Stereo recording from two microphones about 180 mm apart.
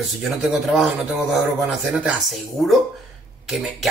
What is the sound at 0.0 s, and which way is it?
Speech, centre (ahead or behind).